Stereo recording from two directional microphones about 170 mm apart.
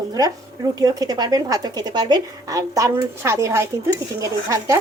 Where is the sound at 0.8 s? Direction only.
20° right (ahead or behind).